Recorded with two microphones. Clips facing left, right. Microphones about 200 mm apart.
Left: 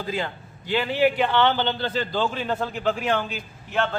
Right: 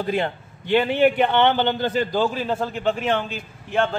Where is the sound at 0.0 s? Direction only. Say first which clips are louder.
Right 5 dB; 60° right (ahead or behind).